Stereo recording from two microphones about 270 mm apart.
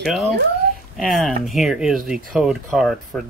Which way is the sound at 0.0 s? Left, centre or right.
Centre.